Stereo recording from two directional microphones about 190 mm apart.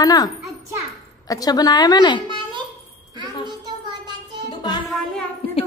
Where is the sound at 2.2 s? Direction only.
25° right (ahead or behind).